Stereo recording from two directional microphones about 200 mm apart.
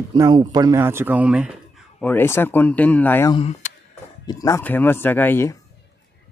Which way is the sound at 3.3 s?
30° left (ahead or behind).